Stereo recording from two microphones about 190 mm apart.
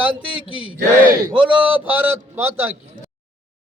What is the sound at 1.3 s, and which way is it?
A man's voice, 5° right (ahead or behind).